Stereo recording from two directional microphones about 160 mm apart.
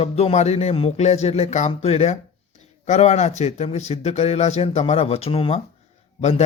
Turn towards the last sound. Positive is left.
turn(degrees=45)  # may be behind; listen again after turning